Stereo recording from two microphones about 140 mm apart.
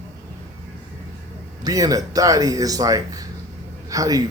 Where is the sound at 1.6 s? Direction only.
25° right (ahead or behind).